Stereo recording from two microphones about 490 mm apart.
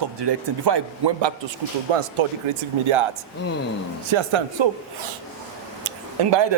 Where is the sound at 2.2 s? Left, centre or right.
Right.